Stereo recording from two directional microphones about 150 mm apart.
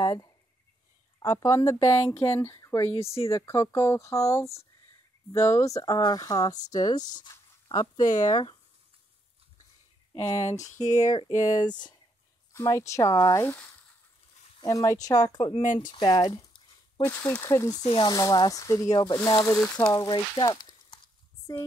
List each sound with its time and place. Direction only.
0.0 s a sound: 25° left (ahead or behind)
1.2 s speech: 20° left (ahead or behind)
10.1 s speech: 45° left (ahead or behind)
10.5 s speech: 20° left (ahead or behind)
15.6 s speech: 60° left (ahead or behind)
15.9 s a sound: 30° left (ahead or behind)
17.0 s speech: 10° left (ahead or behind)
17.5 s speech: 20° left (ahead or behind)